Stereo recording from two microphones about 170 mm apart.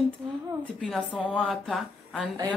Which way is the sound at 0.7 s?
5° left (ahead or behind).